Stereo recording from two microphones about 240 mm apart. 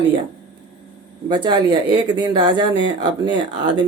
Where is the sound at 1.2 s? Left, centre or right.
Centre.